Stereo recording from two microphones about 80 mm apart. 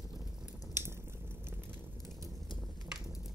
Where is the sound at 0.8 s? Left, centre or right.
Right.